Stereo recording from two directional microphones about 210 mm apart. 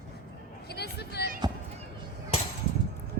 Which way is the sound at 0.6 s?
50° left (ahead or behind).